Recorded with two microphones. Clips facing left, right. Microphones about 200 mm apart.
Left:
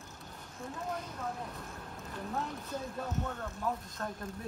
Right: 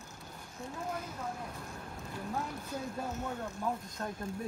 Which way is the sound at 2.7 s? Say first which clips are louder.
Even; 10° right (ahead or behind).